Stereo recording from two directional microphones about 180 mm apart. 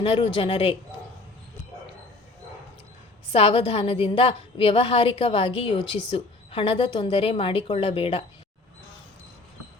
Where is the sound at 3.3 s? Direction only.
30° left (ahead or behind).